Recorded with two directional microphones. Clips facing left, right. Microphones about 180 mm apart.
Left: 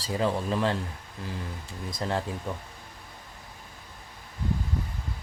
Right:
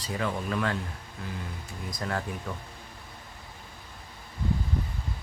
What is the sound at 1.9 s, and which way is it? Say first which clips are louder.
Speech: left 3 dB; 25° left (ahead or behind).